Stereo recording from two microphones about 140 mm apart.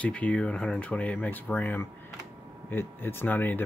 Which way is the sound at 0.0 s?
10° left (ahead or behind).